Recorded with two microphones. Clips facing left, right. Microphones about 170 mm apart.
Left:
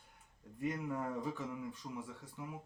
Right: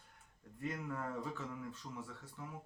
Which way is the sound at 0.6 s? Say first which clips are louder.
Left 4 dB; 15° left (ahead or behind).